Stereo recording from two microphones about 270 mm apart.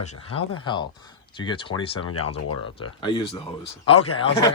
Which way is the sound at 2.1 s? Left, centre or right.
Left.